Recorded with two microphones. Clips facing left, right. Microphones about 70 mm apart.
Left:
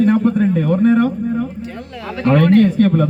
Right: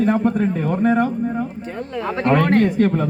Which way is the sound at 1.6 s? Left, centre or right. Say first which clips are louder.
Right 2 dB; right.